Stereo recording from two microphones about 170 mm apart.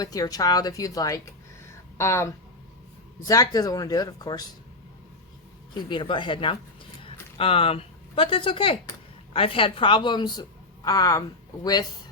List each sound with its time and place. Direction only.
0.0 s speech: 20° left (ahead or behind)
5.7 s speech: 30° left (ahead or behind)